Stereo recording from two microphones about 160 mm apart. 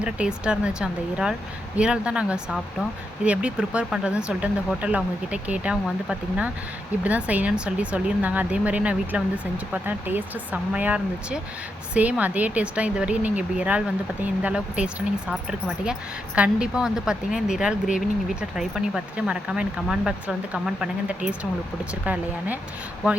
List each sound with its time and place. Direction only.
0.0 s speech: 5° right (ahead or behind)